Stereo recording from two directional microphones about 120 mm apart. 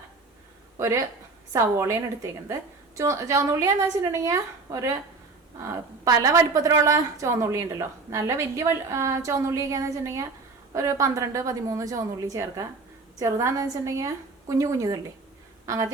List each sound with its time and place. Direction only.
0.8 s a woman's voice: 25° right (ahead or behind)
6.1 s a woman's voice: 30° right (ahead or behind)